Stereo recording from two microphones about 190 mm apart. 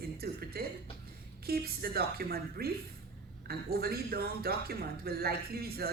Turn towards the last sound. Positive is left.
turn(degrees=-55)  # may be behind; listen again after turning